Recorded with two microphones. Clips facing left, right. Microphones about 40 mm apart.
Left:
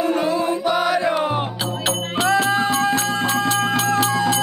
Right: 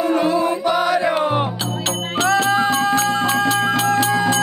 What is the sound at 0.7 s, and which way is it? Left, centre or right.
Chant, centre.